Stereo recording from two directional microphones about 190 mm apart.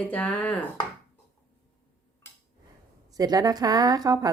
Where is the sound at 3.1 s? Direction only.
20° right (ahead or behind).